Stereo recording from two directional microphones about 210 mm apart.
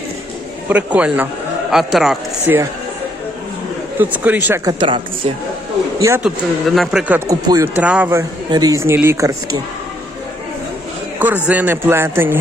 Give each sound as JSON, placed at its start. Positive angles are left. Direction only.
{"t": 0.7, "sound": "speech", "side_deg": -5}
{"t": 3.9, "sound": "speech", "side_deg": -5}
{"t": 4.8, "sound": "a woman's voice", "side_deg": -25}
{"t": 6.0, "sound": "speech", "side_deg": -10}
{"t": 6.7, "sound": "speech", "side_deg": 0}
{"t": 7.3, "sound": "speech", "side_deg": -15}
{"t": 7.8, "sound": "speech", "side_deg": -5}
{"t": 8.4, "sound": "speech", "side_deg": -20}
{"t": 11.4, "sound": "speech", "side_deg": -10}